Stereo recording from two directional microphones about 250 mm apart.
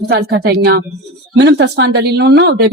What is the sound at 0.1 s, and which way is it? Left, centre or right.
Speech, right.